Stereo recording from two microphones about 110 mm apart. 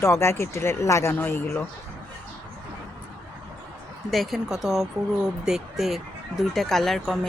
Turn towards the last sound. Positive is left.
turn(degrees=0)  # may be behind; listen again after turning